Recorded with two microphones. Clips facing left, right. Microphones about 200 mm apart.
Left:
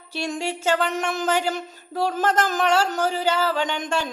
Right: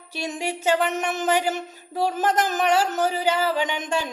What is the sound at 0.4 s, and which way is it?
Speech, 20° right (ahead or behind).